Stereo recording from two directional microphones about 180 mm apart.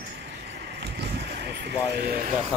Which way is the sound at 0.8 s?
70° right (ahead or behind).